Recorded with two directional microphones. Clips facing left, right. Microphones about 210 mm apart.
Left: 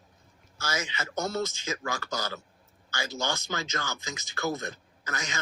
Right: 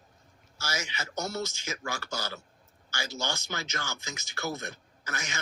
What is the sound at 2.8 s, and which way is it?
Speech, 55° left (ahead or behind).